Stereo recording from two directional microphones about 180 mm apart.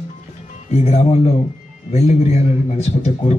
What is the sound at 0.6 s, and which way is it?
A man's voice, 35° left (ahead or behind).